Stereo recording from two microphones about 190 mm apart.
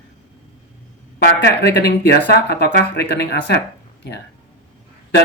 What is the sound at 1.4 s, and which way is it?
Speech, 60° left (ahead or behind).